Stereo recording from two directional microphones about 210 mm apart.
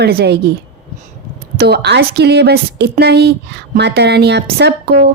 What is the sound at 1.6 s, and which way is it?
A woman's voice, 50° right (ahead or behind).